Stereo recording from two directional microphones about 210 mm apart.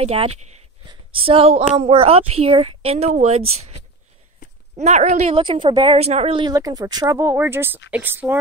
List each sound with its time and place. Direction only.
0.0 s a woman's voice: 30° right (ahead or behind)
4.7 s a woman's voice: 35° right (ahead or behind); by 8.4 s 10° right (ahead or behind)